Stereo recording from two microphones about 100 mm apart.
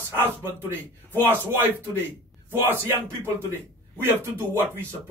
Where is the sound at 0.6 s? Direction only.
20° right (ahead or behind).